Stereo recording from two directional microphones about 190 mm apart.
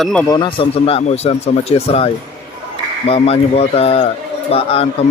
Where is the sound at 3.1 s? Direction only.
30° left (ahead or behind).